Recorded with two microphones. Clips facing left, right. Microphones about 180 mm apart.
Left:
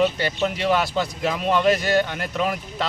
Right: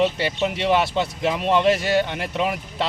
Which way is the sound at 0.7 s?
25° right (ahead or behind).